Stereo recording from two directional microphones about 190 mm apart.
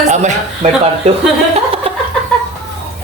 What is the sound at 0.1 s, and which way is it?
Speech, 40° right (ahead or behind).